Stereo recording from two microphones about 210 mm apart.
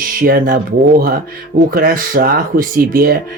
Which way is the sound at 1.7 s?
45° right (ahead or behind).